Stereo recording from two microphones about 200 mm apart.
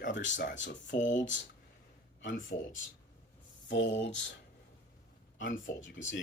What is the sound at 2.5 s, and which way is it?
Speech, 55° left (ahead or behind).